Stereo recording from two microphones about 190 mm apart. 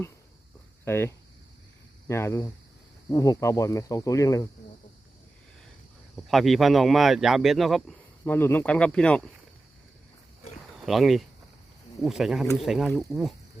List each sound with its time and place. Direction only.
0.9 s speech: 10° left (ahead or behind)
6.2 s speech: centre (ahead or behind)
8.2 s speech: 10° left (ahead or behind)
10.8 s speech: centre (ahead or behind)